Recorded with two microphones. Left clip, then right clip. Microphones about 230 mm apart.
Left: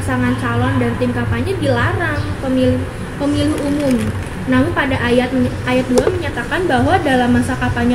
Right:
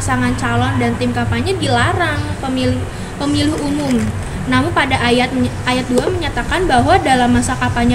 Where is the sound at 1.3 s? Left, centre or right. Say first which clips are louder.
Right 2 dB; right.